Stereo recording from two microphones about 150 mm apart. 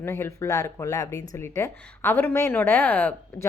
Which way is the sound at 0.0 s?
20° left (ahead or behind).